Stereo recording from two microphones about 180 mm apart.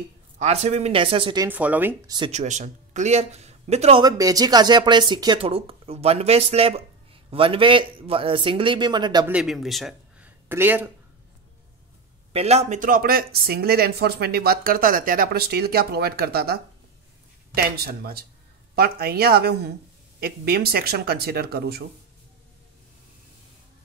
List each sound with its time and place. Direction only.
0.4 s a man's voice: 35° right (ahead or behind)
1.5 s speech: 10° right (ahead or behind)
2.0 s speech: 25° right (ahead or behind)
2.3 s a man's voice: 40° right (ahead or behind)
4.0 s speech: 20° right (ahead or behind)
9.3 s speech: 5° right (ahead or behind)
12.3 s speech: 35° right (ahead or behind); by 16.5 s 60° right (ahead or behind)
17.6 s speech: 55° right (ahead or behind)